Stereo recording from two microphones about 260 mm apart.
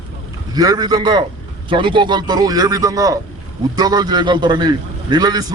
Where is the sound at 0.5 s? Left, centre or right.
Centre.